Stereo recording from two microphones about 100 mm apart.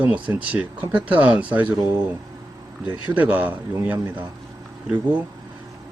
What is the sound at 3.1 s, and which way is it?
Speech, 15° right (ahead or behind).